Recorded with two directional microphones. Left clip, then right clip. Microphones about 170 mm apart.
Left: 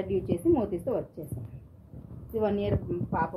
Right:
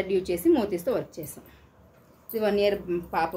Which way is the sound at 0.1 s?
20° right (ahead or behind).